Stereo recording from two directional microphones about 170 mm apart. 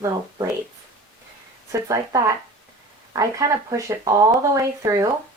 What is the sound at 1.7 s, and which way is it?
Speech, 20° right (ahead or behind).